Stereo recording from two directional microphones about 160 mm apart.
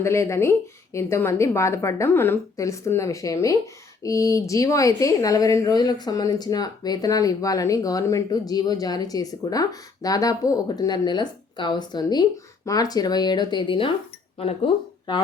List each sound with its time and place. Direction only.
0.0 s a woman's voice: 15° left (ahead or behind); by 13.9 s 30° left (ahead or behind)